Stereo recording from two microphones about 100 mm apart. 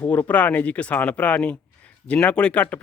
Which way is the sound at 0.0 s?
15° left (ahead or behind).